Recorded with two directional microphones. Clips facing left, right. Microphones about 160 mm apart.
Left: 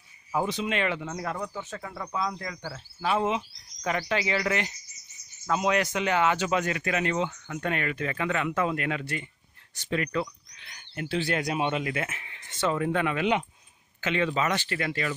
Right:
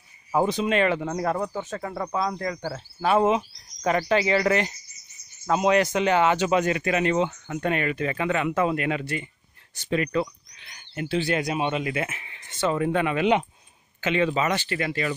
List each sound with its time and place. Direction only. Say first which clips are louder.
0.3 s speech: right 6 dB; 40° right (ahead or behind)
5.5 s speech: right 5 dB; 30° right (ahead or behind)
14.0 s speech: right 3 dB; 15° right (ahead or behind)